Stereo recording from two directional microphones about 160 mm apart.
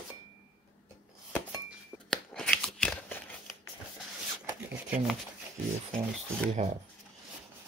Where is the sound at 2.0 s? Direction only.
5° left (ahead or behind).